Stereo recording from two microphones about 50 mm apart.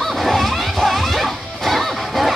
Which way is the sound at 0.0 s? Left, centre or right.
Centre.